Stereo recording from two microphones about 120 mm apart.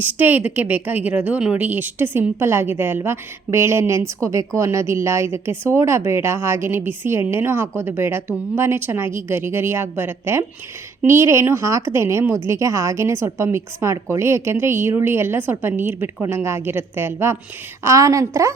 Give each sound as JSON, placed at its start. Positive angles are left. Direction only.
{"t": 0.0, "sound": "a woman's voice", "side_deg": -15}